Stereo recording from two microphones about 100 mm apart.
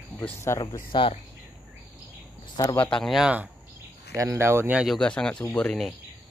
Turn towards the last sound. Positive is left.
turn(degrees=10)  # may be behind; listen again after turning